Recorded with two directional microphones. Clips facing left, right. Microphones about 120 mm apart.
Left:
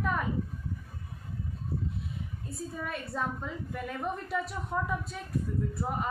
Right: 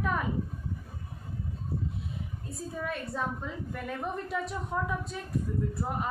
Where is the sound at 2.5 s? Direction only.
Centre (ahead or behind).